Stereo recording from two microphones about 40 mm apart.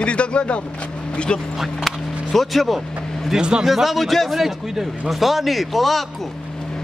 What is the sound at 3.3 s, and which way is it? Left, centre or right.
Speech, right.